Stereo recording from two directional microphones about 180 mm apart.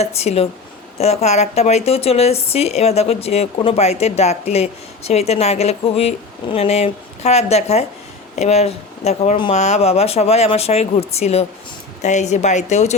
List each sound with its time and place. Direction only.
0.0 s speech: 35° left (ahead or behind)